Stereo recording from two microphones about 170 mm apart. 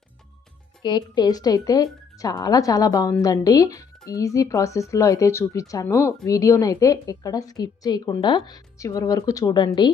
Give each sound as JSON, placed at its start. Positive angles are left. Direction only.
{"t": 0.8, "sound": "a woman's voice", "side_deg": 25}